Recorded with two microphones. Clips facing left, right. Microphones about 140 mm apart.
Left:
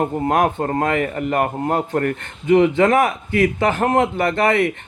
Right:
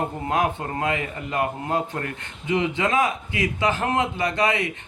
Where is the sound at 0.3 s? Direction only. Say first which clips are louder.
Left 5 dB; 50° left (ahead or behind).